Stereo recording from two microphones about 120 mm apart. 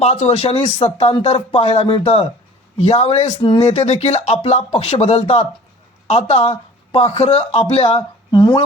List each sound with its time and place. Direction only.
0.0 s speech: 60° left (ahead or behind)
8.3 s speech: 40° left (ahead or behind)